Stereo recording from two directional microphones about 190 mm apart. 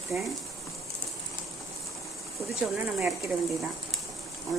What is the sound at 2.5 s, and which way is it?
Speech, centre (ahead or behind).